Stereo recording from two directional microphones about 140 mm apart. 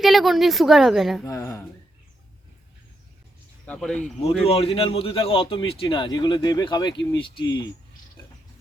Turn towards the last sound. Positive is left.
turn(degrees=35)  # may be behind; listen again after turning